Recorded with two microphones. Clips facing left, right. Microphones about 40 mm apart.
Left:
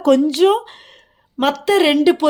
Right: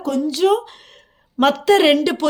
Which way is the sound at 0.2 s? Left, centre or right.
Left.